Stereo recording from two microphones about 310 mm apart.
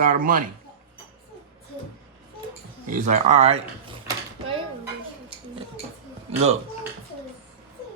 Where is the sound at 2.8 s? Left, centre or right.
Right.